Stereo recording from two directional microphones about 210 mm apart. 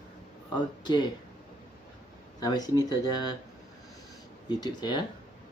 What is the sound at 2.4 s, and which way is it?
Speech, 20° left (ahead or behind).